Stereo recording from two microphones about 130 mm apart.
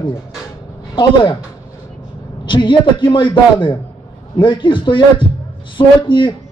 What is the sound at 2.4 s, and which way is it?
A man's voice, 40° left (ahead or behind).